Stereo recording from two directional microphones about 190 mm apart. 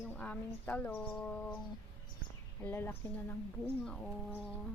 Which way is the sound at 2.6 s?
10° left (ahead or behind).